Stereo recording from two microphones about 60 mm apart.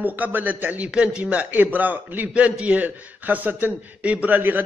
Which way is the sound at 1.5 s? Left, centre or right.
Right.